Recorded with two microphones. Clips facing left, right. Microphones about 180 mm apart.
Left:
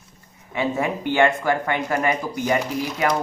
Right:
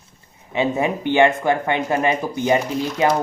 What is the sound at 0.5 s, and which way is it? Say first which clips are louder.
Speech: right 3 dB; 20° right (ahead or behind).